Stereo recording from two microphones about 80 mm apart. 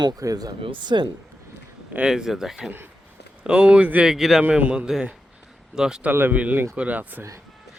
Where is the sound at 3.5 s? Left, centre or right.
Centre.